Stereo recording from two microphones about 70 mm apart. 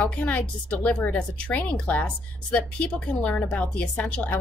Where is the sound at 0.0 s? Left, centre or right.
Centre.